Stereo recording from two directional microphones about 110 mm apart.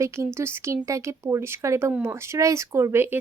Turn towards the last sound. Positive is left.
turn(degrees=-20)  # may be behind; listen again after turning